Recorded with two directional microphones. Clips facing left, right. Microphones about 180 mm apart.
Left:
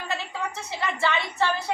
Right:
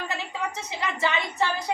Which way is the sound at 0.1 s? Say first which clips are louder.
Even; 20° right (ahead or behind).